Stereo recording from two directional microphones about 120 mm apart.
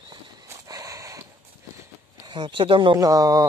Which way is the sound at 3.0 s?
30° right (ahead or behind).